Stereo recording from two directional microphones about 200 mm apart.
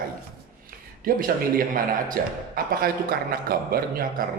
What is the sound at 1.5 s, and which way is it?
A man's voice, 45° right (ahead or behind).